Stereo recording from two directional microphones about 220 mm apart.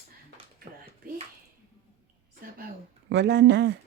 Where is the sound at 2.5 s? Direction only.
45° right (ahead or behind).